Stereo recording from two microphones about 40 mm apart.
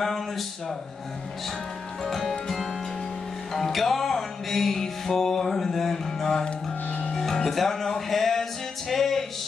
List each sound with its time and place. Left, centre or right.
0.0 s speech: centre
2.0 s music: centre